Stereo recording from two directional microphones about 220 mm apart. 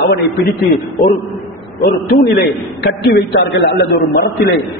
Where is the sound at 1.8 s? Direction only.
45° left (ahead or behind).